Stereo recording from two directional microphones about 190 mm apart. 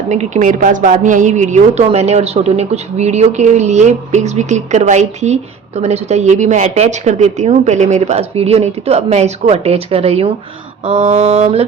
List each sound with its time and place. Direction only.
0.1 s a woman's voice: 40° right (ahead or behind)